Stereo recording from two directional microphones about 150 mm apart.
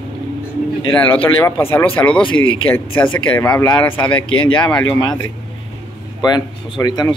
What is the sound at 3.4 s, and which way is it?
Speech, 20° left (ahead or behind).